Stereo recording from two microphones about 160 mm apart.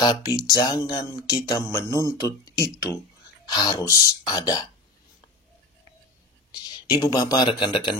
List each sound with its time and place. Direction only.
0.0 s speech: 25° left (ahead or behind)
6.5 s speech: 20° left (ahead or behind)